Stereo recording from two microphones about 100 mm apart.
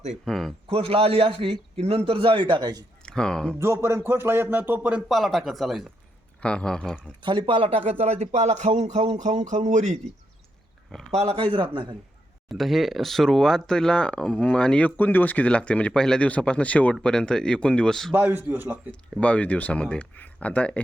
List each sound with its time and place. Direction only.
0.3 s speech: 5° left (ahead or behind)
0.7 s a man's voice: 75° right (ahead or behind)
2.0 s a man's voice: 65° right (ahead or behind)
2.5 s a man's voice: 45° right (ahead or behind)
3.0 s speech: 5° left (ahead or behind)
3.5 s speech: 25° right (ahead or behind)
5.0 s speech: centre (ahead or behind)
6.4 s speech: 10° left (ahead or behind)
7.2 s speech: 55° right (ahead or behind); by 9.1 s 90° right
11.2 s speech: 80° right
11.5 s a man's voice: 55° right (ahead or behind)
12.5 s speech: centre (ahead or behind)
18.1 s a man's voice: 20° right (ahead or behind)
19.2 s speech: 15° left (ahead or behind)